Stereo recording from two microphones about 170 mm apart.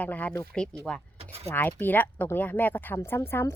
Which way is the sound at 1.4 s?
10° left (ahead or behind).